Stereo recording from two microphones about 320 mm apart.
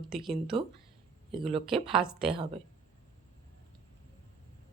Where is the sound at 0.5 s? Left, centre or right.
Centre.